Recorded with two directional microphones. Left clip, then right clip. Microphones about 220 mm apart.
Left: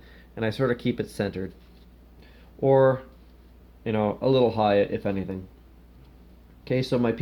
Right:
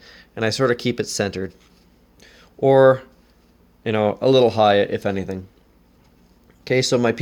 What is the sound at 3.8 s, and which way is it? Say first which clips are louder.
Speech: right 6 dB; 50° right (ahead or behind).